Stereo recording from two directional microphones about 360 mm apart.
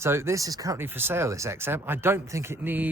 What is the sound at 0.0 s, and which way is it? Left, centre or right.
Speech, centre.